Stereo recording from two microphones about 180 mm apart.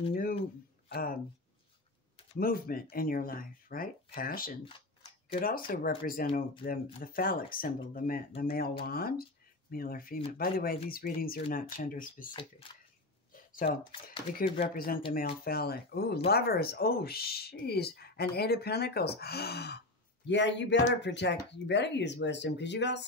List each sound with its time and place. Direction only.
0.1 s a sound: 55° left (ahead or behind)
0.8 s speech: 60° left (ahead or behind)
2.3 s speech: 55° left (ahead or behind)
5.7 s speech: 55° left (ahead or behind)
12.6 s speech: 30° left (ahead or behind)
13.3 s a sound: 50° left (ahead or behind)
14.0 s speech: 55° left (ahead or behind)
20.2 s speech: 80° left